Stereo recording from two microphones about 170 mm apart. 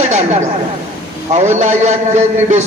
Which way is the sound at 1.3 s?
45° right (ahead or behind).